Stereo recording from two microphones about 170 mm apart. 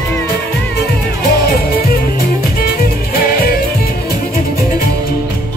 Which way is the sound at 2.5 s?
60° left (ahead or behind).